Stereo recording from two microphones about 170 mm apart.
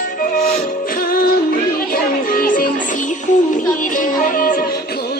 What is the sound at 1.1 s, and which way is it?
Music, 55° left (ahead or behind).